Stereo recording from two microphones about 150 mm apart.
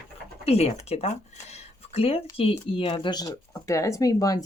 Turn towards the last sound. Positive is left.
turn(degrees=25)  # may be behind; listen again after turning